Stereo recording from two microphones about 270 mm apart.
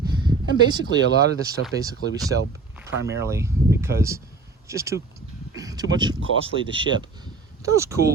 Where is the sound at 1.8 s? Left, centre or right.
Centre.